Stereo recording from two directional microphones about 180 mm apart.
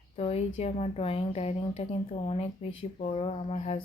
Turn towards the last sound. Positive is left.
turn(degrees=35)  # may be behind; listen again after turning